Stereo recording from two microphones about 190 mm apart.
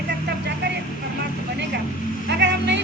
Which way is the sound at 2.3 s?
65° right (ahead or behind).